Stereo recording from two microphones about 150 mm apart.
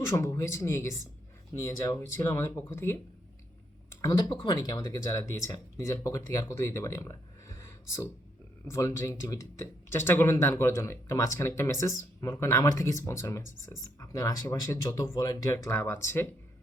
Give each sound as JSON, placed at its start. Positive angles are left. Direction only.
{"t": 0.1, "sound": "speech", "side_deg": 20}
{"t": 4.2, "sound": "speech", "side_deg": 30}